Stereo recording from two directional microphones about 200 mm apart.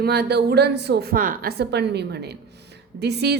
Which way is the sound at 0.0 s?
55° right (ahead or behind).